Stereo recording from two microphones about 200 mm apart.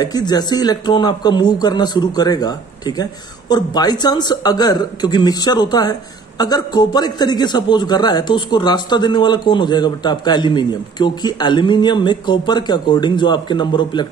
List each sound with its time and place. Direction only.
0.0 s speech: 20° left (ahead or behind)